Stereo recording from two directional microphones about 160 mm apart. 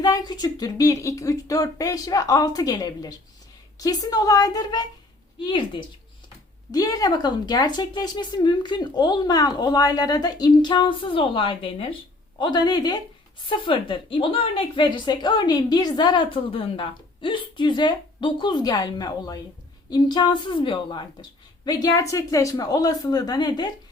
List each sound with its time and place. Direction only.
0.0 s a woman's voice: 25° left (ahead or behind)